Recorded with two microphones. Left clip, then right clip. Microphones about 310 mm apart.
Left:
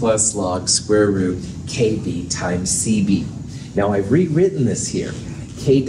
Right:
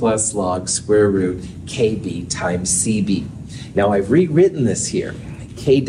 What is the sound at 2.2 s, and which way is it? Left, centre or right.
Speech, right.